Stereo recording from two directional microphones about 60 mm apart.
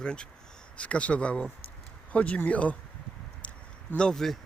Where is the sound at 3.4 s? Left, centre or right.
Left.